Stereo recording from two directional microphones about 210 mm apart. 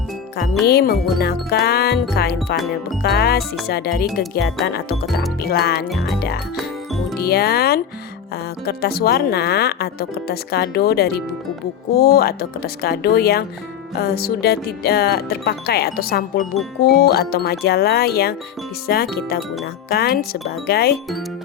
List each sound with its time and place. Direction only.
0.6 s speech: 50° left (ahead or behind)